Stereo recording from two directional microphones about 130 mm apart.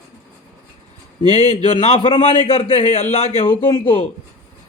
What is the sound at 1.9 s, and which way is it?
Speech, 40° left (ahead or behind).